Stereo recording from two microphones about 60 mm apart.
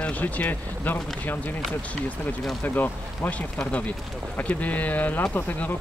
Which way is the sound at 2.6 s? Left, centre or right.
Left.